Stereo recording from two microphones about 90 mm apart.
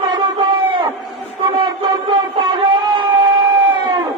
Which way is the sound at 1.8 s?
60° right (ahead or behind).